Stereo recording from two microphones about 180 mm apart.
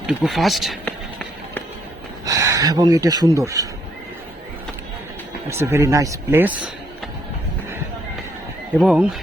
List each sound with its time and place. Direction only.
0.1 s speech: centre (ahead or behind)
2.2 s speech: 20° right (ahead or behind)
5.5 s speech: 15° right (ahead or behind)
8.8 s speech: 5° right (ahead or behind)